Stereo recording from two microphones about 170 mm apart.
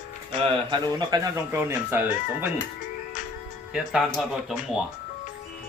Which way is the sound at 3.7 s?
Centre (ahead or behind).